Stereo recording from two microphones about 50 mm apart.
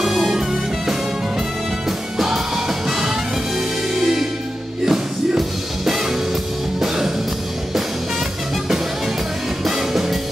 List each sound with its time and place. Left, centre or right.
0.0 s music: centre
8.6 s music: centre